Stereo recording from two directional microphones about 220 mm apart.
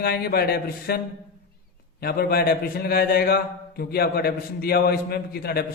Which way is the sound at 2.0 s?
45° left (ahead or behind).